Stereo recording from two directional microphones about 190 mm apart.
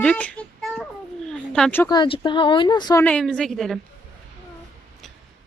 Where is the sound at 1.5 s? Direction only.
5° left (ahead or behind).